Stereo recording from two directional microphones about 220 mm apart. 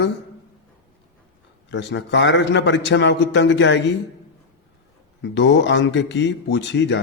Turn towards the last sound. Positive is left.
turn(degrees=55)  # may be behind; listen again after turning